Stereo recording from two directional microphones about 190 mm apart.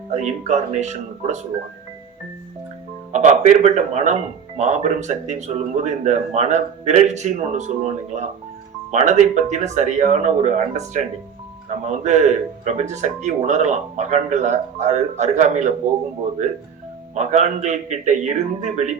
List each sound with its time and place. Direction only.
0.1 s speech: 40° right (ahead or behind)
3.1 s speech: 40° right (ahead or behind)
17.2 s speech: 40° right (ahead or behind)